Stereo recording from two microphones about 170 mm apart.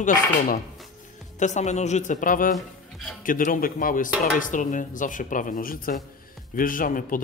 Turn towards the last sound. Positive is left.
turn(degrees=55)  # may be behind; listen again after turning